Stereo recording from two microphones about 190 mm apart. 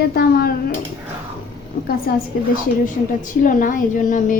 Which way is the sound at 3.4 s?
45° left (ahead or behind).